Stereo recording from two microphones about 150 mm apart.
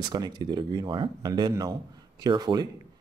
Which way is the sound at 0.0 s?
30° right (ahead or behind).